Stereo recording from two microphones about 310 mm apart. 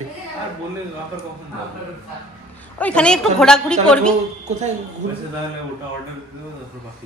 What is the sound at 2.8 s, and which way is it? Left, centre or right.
A woman's voice, centre.